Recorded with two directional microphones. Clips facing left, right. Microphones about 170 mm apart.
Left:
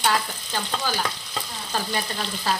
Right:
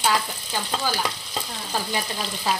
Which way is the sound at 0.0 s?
10° right (ahead or behind).